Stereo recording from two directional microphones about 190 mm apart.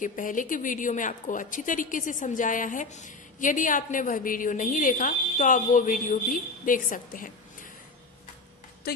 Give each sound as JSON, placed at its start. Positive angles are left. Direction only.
{"t": 0.0, "sound": "a woman's voice", "side_deg": 45}